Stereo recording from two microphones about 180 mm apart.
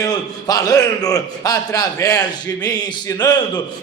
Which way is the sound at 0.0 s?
20° left (ahead or behind).